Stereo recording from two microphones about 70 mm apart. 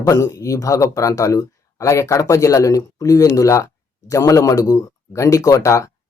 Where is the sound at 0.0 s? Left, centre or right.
Left.